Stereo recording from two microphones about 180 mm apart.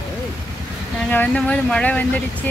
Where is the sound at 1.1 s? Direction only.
10° left (ahead or behind).